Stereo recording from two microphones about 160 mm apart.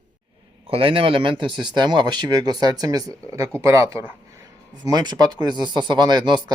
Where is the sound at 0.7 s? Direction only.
35° right (ahead or behind).